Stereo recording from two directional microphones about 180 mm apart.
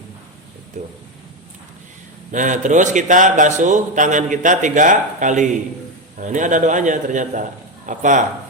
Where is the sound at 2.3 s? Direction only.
45° right (ahead or behind).